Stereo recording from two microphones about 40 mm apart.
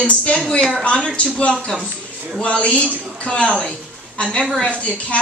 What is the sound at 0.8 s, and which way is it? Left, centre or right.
Speech, left.